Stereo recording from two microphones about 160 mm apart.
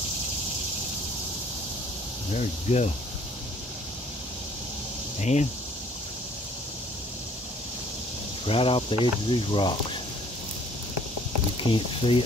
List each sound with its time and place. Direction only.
2.3 s speech: 45° left (ahead or behind)
5.2 s speech: 45° left (ahead or behind)
8.5 s speech: 35° left (ahead or behind)
11.7 s speech: 35° left (ahead or behind)